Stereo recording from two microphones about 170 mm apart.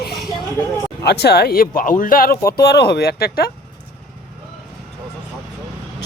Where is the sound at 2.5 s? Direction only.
70° left (ahead or behind).